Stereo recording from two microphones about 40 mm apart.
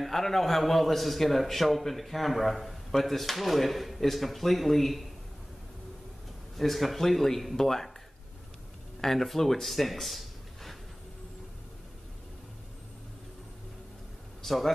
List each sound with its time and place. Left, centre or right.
0.0 s a man's voice: centre
6.5 s a man's voice: centre
9.0 s speech: centre
14.4 s a sound: centre